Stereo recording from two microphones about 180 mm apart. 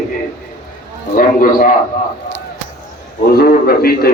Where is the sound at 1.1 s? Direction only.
50° left (ahead or behind).